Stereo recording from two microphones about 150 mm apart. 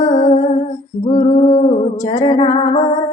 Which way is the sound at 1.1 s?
55° left (ahead or behind).